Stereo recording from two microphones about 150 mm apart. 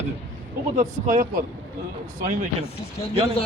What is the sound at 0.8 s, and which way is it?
Speech, 60° right (ahead or behind).